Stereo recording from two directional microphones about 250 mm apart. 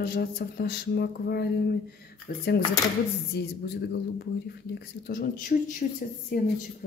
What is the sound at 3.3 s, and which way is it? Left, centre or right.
Speech, left.